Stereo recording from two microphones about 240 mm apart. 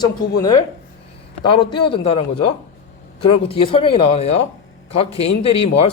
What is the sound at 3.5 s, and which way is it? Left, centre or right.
Speech, left.